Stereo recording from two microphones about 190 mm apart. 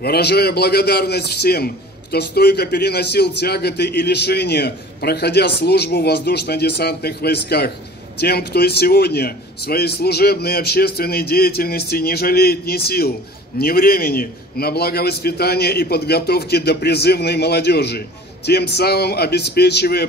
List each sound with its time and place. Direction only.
0.0 s a man's voice: 55° left (ahead or behind)